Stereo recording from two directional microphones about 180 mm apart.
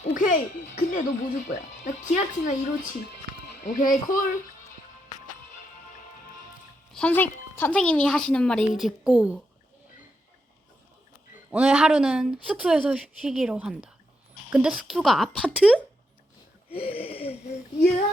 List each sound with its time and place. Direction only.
0.0 s speech: 45° left (ahead or behind)
3.7 s speech: 50° left (ahead or behind)
6.9 s a woman's voice: 10° left (ahead or behind)
11.5 s a woman's voice: 5° right (ahead or behind)
15.5 s a woman's voice: 5° right (ahead or behind)
16.7 s a sound: 35° left (ahead or behind)